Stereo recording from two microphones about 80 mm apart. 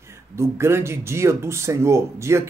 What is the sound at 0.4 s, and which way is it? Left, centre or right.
Speech, right.